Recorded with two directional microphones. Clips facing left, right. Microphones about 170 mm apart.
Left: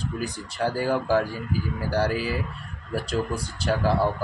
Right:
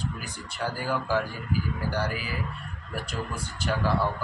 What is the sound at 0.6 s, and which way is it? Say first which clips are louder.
A man's voice: left 6 dB; 35° left (ahead or behind).